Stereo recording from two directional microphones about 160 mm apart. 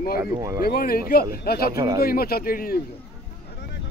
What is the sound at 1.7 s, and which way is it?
Speech, 25° right (ahead or behind).